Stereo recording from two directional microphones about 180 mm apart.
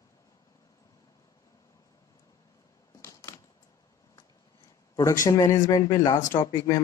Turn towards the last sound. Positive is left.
turn(degrees=20)  # may be behind; listen again after turning